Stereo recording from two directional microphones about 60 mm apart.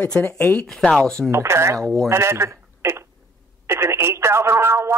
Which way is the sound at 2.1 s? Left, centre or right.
Right.